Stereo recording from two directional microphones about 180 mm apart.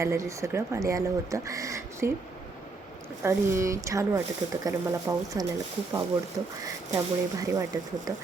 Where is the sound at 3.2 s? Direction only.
15° right (ahead or behind).